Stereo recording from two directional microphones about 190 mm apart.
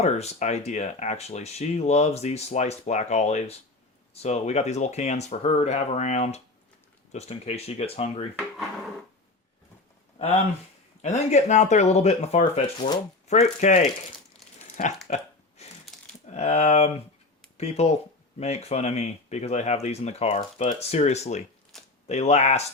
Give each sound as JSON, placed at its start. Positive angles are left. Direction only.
{"t": 0.0, "sound": "speech", "side_deg": 35}
{"t": 11.0, "sound": "speech", "side_deg": 35}
{"t": 14.6, "sound": "a sound", "side_deg": 40}
{"t": 16.2, "sound": "speech", "side_deg": 35}